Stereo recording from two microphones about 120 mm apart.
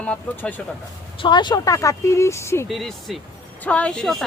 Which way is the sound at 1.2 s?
40° left (ahead or behind).